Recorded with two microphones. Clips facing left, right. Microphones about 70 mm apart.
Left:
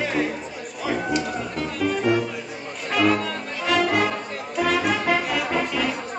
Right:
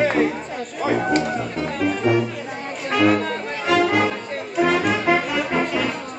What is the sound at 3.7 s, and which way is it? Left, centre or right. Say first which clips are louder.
Music: right 3 dB; centre.